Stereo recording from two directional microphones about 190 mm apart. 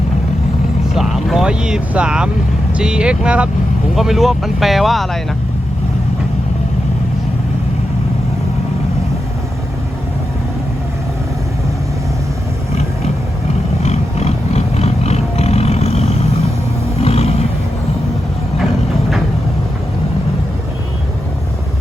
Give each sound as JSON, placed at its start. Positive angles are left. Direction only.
{"t": 0.9, "sound": "speech", "side_deg": 0}
{"t": 13.8, "sound": "roaring cats", "side_deg": 35}
{"t": 17.0, "sound": "a sound", "side_deg": 30}